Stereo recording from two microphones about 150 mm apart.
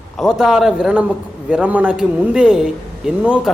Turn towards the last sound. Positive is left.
turn(degrees=-5)  # may be behind; listen again after turning